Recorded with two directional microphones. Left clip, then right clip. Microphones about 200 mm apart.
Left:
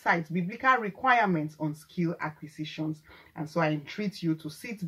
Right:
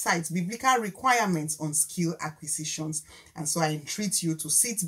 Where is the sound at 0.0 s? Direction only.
5° right (ahead or behind).